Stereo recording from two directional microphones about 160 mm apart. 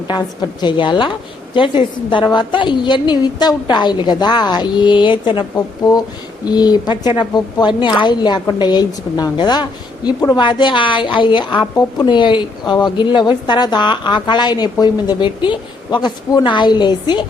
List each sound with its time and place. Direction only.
0.1 s a woman's voice: 25° left (ahead or behind)